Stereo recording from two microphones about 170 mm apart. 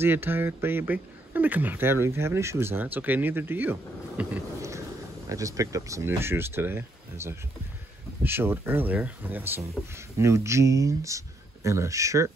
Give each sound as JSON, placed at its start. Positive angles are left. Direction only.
{"t": 0.0, "sound": "speech", "side_deg": -10}
{"t": 4.2, "sound": "a sound", "side_deg": -15}
{"t": 5.3, "sound": "speech", "side_deg": -20}